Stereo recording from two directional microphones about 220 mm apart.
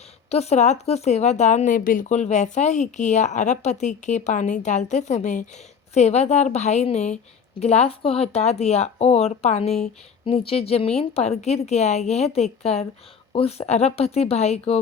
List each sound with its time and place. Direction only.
0.3 s a woman's voice: 30° left (ahead or behind)